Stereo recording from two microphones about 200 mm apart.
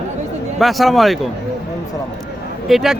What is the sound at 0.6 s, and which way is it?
Speech, centre (ahead or behind).